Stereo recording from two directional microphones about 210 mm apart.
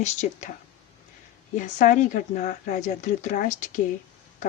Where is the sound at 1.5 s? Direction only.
35° left (ahead or behind).